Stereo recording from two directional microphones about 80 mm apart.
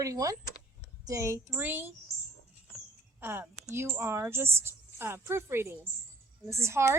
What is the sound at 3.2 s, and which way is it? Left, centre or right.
A woman's voice, right.